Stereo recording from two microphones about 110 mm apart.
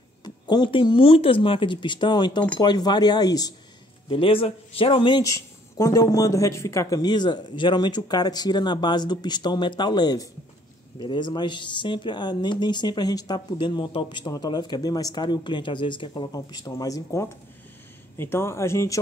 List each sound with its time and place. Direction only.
0.2 s speech: 40° left (ahead or behind)
4.1 s a man's voice: 55° left (ahead or behind)
5.2 s speech: 30° left (ahead or behind); by 16.3 s 45° left (ahead or behind)
16.3 s speech: 35° left (ahead or behind)